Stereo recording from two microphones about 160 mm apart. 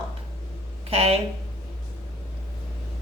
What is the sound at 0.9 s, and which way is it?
Speech, 35° right (ahead or behind).